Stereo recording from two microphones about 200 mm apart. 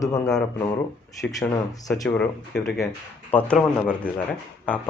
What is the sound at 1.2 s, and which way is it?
Speech, 5° left (ahead or behind).